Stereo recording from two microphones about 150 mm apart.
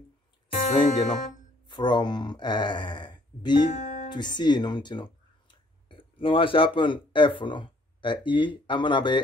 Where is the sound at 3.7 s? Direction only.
55° left (ahead or behind).